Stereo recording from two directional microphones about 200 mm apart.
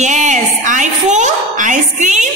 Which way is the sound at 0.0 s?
40° right (ahead or behind).